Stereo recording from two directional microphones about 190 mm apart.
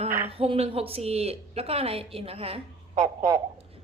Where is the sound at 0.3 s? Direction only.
30° right (ahead or behind).